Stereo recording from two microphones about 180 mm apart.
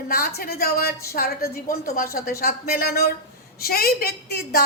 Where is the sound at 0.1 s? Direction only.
55° left (ahead or behind).